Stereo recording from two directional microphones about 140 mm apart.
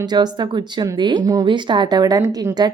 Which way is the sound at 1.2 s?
30° right (ahead or behind).